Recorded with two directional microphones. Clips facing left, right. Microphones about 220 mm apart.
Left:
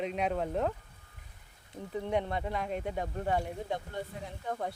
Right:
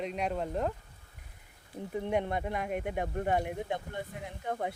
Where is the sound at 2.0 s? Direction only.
15° right (ahead or behind).